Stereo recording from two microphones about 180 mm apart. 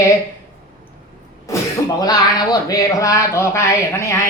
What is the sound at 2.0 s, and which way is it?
Speech, 20° left (ahead or behind).